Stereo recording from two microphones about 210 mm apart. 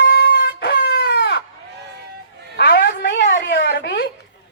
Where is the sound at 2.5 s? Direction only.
45° left (ahead or behind).